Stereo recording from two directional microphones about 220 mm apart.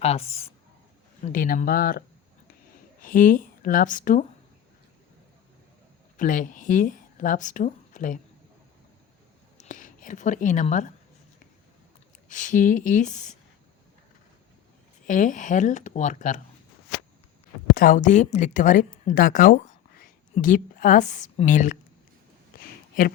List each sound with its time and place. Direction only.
0.0 s speech: 30° left (ahead or behind)
1.3 s speech: 40° left (ahead or behind)
6.1 s speech: 35° left (ahead or behind)
9.6 s speech: 35° left (ahead or behind)
12.3 s speech: 35° left (ahead or behind)
15.0 s speech: 35° left (ahead or behind)
17.7 s speech: 35° left (ahead or behind)
22.6 s a sound: 40° left (ahead or behind)